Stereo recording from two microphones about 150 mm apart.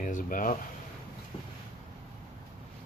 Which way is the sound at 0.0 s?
65° left (ahead or behind).